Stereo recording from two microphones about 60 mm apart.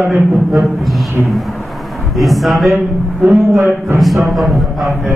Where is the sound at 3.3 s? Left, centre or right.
Right.